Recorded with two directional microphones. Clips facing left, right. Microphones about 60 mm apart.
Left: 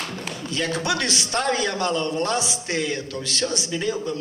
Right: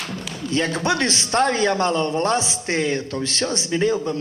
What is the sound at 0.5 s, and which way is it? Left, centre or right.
A man's voice, right.